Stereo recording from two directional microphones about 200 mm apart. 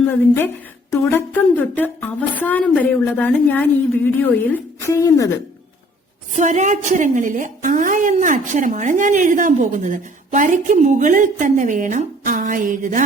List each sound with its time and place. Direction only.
1.1 s a woman's voice: 10° left (ahead or behind)
6.3 s a woman's voice: 35° right (ahead or behind)